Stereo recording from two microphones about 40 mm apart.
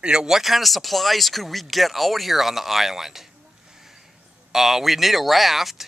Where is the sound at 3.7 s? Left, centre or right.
Centre.